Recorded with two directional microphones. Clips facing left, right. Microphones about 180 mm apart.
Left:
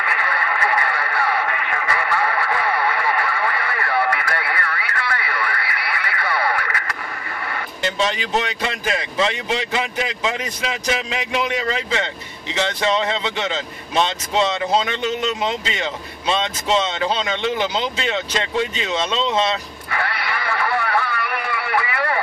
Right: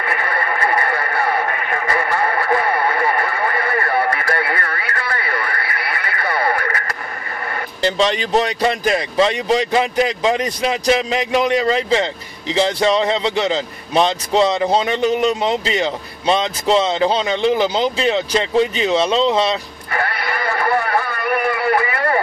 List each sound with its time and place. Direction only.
0.0 s neigh: 45° right (ahead or behind)
7.5 s speech: 35° right (ahead or behind)